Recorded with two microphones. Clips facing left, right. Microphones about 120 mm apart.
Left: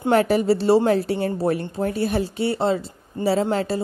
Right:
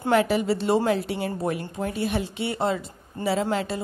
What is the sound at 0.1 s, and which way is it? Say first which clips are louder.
Speech: left 4 dB; 40° left (ahead or behind).